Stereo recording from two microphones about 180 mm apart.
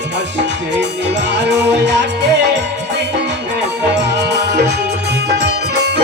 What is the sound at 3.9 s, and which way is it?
Music, 70° right (ahead or behind).